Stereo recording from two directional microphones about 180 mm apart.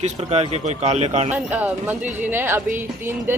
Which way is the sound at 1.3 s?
10° right (ahead or behind).